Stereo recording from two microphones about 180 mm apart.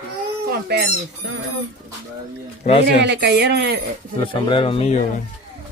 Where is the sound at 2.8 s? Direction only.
70° right (ahead or behind).